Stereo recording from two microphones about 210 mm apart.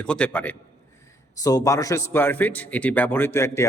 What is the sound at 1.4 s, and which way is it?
Speech, 15° left (ahead or behind).